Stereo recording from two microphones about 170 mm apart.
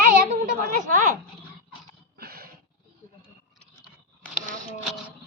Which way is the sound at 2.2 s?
60° right (ahead or behind).